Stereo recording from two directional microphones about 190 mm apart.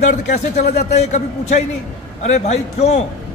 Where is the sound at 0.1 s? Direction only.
40° left (ahead or behind).